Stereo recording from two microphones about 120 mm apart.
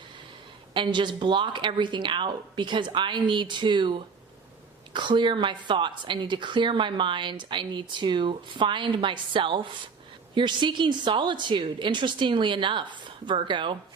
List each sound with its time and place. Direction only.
0.7 s a woman's voice: 40° right (ahead or behind)